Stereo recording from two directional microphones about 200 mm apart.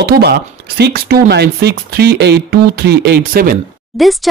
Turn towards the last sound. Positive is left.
turn(degrees=0)  # may be behind; listen again after turning